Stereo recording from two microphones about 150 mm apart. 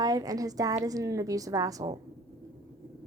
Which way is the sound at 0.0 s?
25° right (ahead or behind).